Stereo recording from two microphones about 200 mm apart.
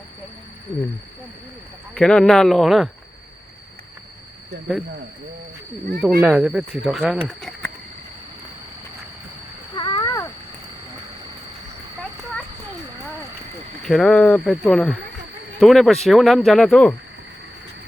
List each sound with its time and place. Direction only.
2.0 s speech: 5° left (ahead or behind)
6.0 s speech: 5° right (ahead or behind)
9.7 s a sound: 20° left (ahead or behind)
13.8 s speech: centre (ahead or behind)